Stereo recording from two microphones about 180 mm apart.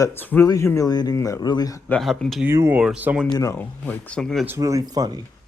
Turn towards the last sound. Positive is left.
turn(degrees=-20)  # may be behind; listen again after turning